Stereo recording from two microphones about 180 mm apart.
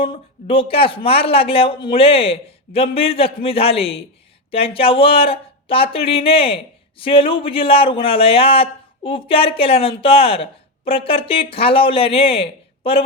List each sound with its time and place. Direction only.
0.0 s speech: 30° left (ahead or behind)